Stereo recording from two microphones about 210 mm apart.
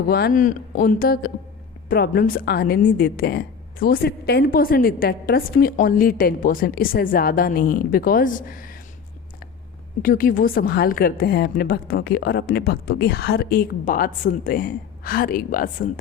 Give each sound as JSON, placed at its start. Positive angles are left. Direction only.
{"t": 0.1, "sound": "a woman's voice", "side_deg": 45}
{"t": 10.0, "sound": "a woman's voice", "side_deg": 40}